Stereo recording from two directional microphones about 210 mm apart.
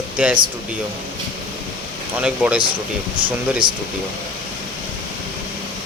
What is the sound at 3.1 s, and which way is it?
Speech, 20° right (ahead or behind).